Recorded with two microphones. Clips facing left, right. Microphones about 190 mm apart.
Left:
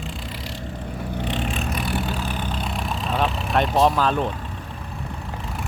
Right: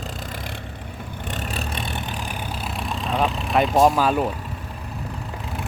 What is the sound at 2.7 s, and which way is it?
Vehicle, centre (ahead or behind).